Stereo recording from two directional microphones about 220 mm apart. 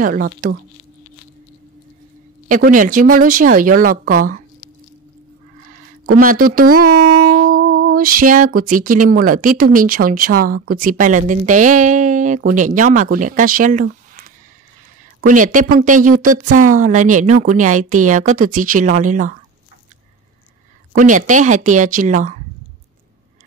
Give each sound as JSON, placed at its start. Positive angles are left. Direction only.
{"t": 0.0, "sound": "speech", "side_deg": -40}
{"t": 2.4, "sound": "speech", "side_deg": -40}
{"t": 6.1, "sound": "speech", "side_deg": -40}
{"t": 6.8, "sound": "speech", "side_deg": -90}
{"t": 7.3, "sound": "a sound", "side_deg": -40}
{"t": 10.7, "sound": "speech", "side_deg": -40}
{"t": 15.2, "sound": "speech", "side_deg": -35}
{"t": 20.9, "sound": "speech", "side_deg": -35}